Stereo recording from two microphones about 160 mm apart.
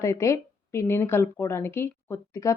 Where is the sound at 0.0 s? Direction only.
20° left (ahead or behind).